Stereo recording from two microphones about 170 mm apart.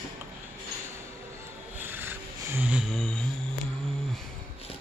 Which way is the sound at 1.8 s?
10° right (ahead or behind).